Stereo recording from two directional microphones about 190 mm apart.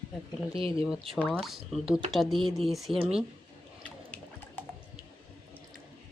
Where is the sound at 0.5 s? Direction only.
30° right (ahead or behind).